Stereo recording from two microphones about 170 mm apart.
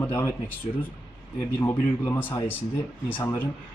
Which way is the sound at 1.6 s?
10° left (ahead or behind).